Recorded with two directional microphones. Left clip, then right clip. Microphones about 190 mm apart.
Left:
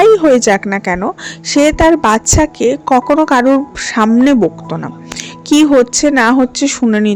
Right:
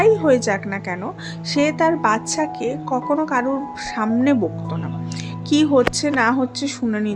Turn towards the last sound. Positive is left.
turn(degrees=40)  # may be behind; listen again after turning